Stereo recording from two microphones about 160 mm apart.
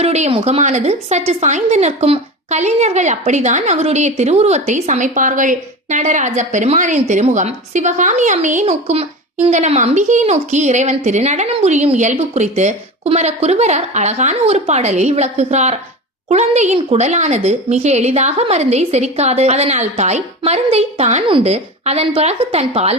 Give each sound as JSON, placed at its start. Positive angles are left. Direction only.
{"t": 0.0, "sound": "a woman's voice", "side_deg": -40}